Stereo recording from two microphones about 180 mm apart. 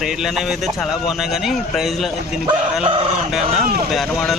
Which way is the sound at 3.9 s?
Centre (ahead or behind).